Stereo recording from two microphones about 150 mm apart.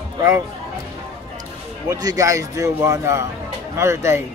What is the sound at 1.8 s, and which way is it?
A man's voice, 25° right (ahead or behind).